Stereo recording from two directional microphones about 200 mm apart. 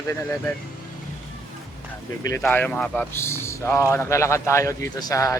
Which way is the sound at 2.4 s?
10° left (ahead or behind).